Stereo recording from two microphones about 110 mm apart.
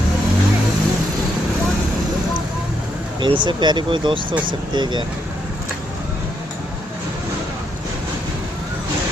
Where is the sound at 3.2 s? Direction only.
45° right (ahead or behind).